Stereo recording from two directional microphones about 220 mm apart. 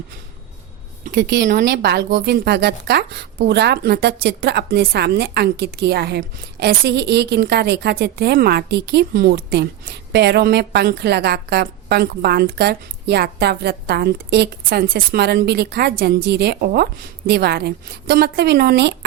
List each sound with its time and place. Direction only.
1.0 s speech: 45° right (ahead or behind)